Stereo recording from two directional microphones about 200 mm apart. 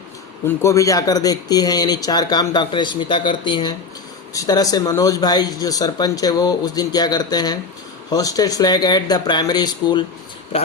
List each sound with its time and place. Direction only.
0.4 s speech: 15° left (ahead or behind)